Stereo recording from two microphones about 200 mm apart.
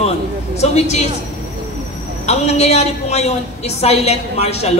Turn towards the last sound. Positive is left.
turn(degrees=30)  # may be behind; listen again after turning